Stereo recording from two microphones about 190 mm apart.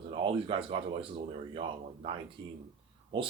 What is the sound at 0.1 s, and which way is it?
Speech, 30° right (ahead or behind).